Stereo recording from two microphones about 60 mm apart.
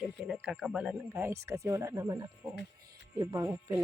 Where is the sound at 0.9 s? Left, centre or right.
Right.